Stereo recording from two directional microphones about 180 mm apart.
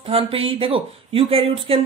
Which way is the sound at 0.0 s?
30° right (ahead or behind).